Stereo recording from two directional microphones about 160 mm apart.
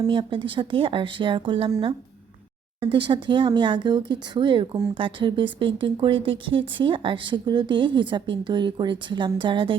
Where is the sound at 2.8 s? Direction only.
30° right (ahead or behind).